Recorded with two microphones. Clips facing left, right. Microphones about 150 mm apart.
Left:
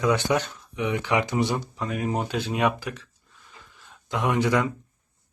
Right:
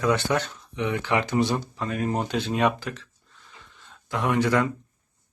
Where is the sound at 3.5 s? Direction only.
5° left (ahead or behind).